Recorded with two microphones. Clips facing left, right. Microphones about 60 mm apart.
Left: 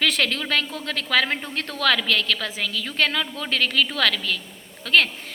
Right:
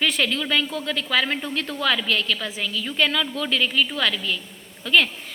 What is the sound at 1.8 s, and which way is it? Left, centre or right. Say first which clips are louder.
A woman's voice: left 2 dB; left.